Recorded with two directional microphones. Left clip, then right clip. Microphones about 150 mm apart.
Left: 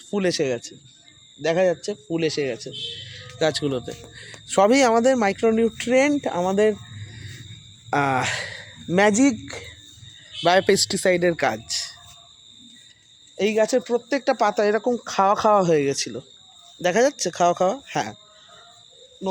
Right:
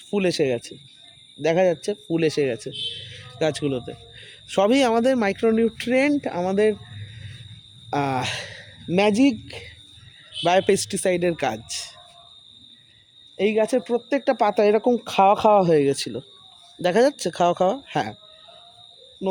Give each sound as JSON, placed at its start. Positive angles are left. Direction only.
{"t": 0.1, "sound": "a man's voice", "side_deg": -35}
{"t": 3.3, "sound": "speech", "side_deg": -20}
{"t": 7.9, "sound": "speech", "side_deg": -5}
{"t": 10.4, "sound": "speech", "side_deg": -10}
{"t": 13.3, "sound": "speech", "side_deg": -20}
{"t": 14.5, "sound": "speech", "side_deg": -45}